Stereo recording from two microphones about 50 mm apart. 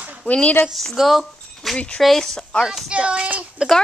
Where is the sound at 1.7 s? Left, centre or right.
Left.